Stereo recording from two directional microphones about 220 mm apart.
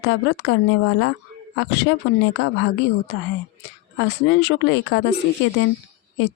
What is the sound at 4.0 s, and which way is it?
Speech, 50° left (ahead or behind).